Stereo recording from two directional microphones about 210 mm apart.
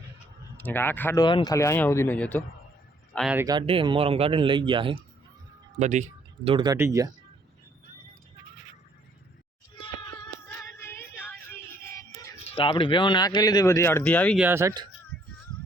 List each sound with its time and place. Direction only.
0.6 s speech: 10° left (ahead or behind)
1.2 s speech: 20° left (ahead or behind); by 3.3 s centre (ahead or behind)
3.3 s speech: 20° right (ahead or behind)
5.8 s speech: 35° right (ahead or behind)
6.7 s speech: 15° right (ahead or behind)
9.8 s female singing: 20° left (ahead or behind)
12.5 s speech: 25° left (ahead or behind); by 14.3 s 5° left (ahead or behind)
14.3 s speech: 10° right (ahead or behind)